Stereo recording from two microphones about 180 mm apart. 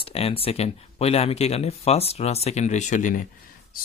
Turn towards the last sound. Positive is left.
turn(degrees=45)  # may be behind; listen again after turning